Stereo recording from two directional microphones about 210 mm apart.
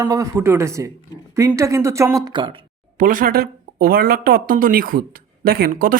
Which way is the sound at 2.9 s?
40° right (ahead or behind).